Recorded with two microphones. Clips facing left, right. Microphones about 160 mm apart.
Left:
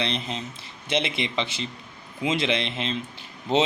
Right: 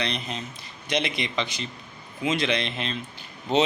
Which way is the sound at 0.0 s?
25° left (ahead or behind).